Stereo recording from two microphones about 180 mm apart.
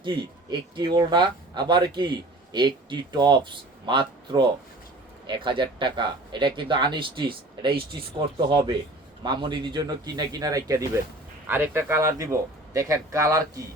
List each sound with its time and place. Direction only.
0.0 s speech: 25° right (ahead or behind)